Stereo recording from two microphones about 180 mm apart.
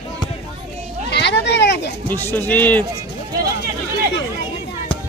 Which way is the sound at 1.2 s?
70° left (ahead or behind).